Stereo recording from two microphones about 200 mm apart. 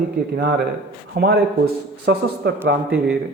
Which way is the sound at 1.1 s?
50° right (ahead or behind).